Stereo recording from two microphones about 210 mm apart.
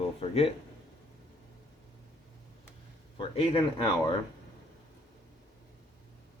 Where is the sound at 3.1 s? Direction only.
25° left (ahead or behind).